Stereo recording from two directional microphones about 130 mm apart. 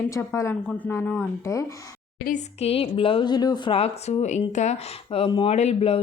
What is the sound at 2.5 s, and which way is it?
A woman's voice, 50° left (ahead or behind).